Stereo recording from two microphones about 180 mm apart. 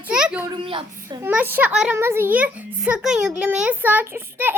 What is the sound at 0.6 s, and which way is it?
Speech, 30° right (ahead or behind).